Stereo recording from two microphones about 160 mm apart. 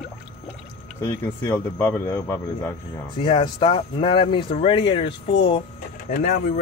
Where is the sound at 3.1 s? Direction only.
35° left (ahead or behind).